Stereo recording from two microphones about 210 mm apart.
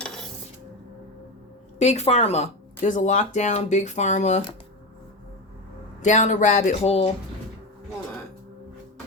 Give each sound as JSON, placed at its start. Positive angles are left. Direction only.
{"t": 1.8, "sound": "speech", "side_deg": 30}
{"t": 6.0, "sound": "speech", "side_deg": 35}